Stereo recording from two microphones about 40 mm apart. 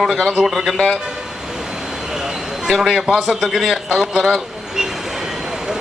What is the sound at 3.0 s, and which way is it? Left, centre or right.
A man's voice, centre.